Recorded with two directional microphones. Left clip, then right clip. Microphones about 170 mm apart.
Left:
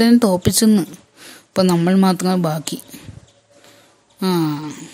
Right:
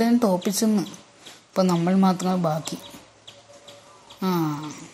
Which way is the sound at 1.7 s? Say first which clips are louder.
Left 6 dB; 50° left (ahead or behind).